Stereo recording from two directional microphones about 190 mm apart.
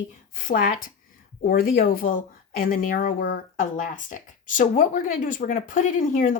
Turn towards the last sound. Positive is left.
turn(degrees=45)  # may be behind; listen again after turning